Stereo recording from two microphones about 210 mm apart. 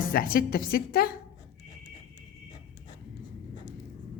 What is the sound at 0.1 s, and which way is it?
A woman's voice, 45° left (ahead or behind).